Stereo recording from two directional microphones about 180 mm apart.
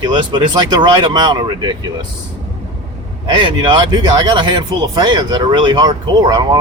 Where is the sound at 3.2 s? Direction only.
25° right (ahead or behind).